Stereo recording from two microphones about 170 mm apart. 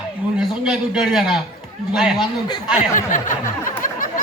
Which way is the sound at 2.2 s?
25° left (ahead or behind).